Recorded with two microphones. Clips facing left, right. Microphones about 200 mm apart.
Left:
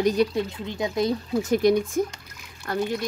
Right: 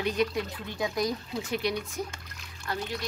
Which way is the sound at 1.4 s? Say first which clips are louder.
Left 12 dB; 45° left (ahead or behind).